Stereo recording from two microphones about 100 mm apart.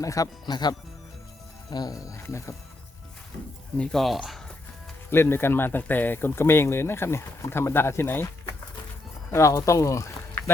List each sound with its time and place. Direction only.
0.0 s speech: 35° left (ahead or behind)
3.8 s speech: centre (ahead or behind)
5.1 s speech: 25° left (ahead or behind)
9.3 s speech: 30° left (ahead or behind)